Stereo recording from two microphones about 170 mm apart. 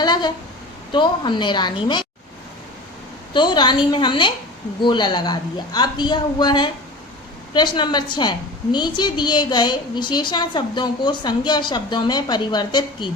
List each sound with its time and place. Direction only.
0.0 s a sound: 25° left (ahead or behind)
0.9 s a woman's voice: 25° left (ahead or behind)
3.3 s a woman's voice: 25° left (ahead or behind)